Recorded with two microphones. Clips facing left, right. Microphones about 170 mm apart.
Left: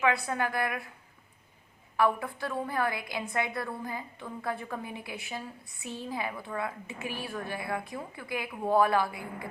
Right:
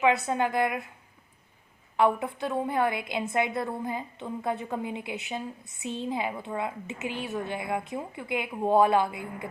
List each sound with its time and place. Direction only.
0.0 s a woman's voice: 20° right (ahead or behind)
2.0 s a woman's voice: 20° right (ahead or behind)